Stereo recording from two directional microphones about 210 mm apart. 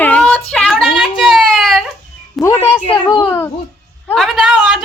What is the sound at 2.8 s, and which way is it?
Speech, 25° left (ahead or behind).